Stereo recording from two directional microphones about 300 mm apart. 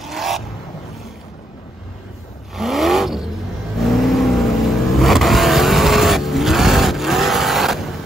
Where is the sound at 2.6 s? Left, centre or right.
Centre.